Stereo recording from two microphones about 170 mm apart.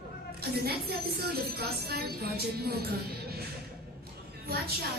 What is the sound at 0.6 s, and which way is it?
Speech, 65° right (ahead or behind).